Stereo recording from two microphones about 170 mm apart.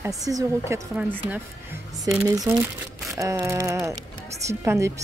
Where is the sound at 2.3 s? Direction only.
20° right (ahead or behind).